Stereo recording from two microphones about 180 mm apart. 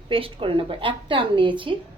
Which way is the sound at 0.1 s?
30° right (ahead or behind).